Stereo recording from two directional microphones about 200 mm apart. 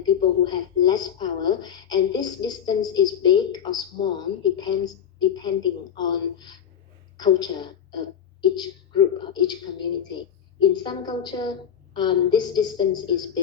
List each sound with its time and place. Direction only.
0.0 s a woman's voice: 20° left (ahead or behind)